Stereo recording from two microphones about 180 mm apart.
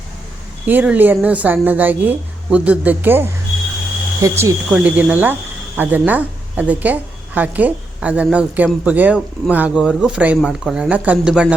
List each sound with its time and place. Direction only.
0.6 s speech: 10° right (ahead or behind)